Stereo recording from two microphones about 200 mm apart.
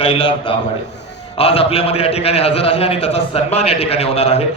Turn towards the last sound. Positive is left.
turn(degrees=30)  # may be behind; listen again after turning